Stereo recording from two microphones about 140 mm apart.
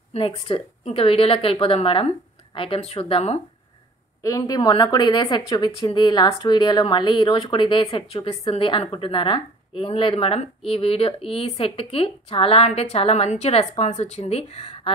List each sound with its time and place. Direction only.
0.1 s speech: 40° left (ahead or behind)
4.2 s speech: 25° left (ahead or behind); by 14.9 s 50° left (ahead or behind)